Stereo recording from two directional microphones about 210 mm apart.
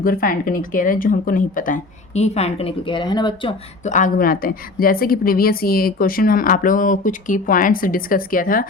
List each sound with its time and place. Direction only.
0.0 s speech: 45° left (ahead or behind); by 3.5 s 20° left (ahead or behind)
3.8 s a woman's voice: 35° left (ahead or behind)